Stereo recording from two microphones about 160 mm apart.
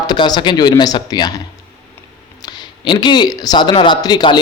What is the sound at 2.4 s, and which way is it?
Speech, 25° left (ahead or behind).